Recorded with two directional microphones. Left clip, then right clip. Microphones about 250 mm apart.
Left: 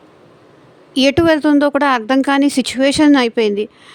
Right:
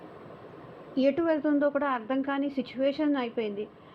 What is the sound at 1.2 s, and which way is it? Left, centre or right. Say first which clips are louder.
Speech: left 13 dB; left.